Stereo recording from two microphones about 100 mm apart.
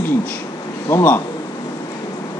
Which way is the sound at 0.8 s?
25° left (ahead or behind).